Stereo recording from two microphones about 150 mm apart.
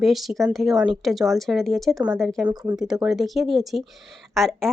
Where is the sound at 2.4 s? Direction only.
30° right (ahead or behind).